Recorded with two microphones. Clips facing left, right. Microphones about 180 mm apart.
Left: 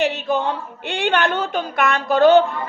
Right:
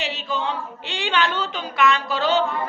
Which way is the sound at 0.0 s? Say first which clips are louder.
Left 7 dB; 55° left (ahead or behind).